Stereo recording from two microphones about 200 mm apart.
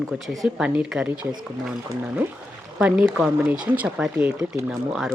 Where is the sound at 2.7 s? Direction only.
5° right (ahead or behind).